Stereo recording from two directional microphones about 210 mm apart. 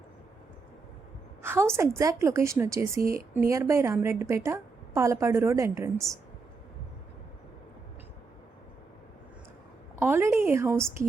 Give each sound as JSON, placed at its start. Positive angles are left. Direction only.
{"t": 1.4, "sound": "a woman's voice", "side_deg": -10}
{"t": 3.0, "sound": "speech", "side_deg": -45}
{"t": 3.3, "sound": "a woman's voice", "side_deg": -10}
{"t": 10.0, "sound": "a woman's voice", "side_deg": -10}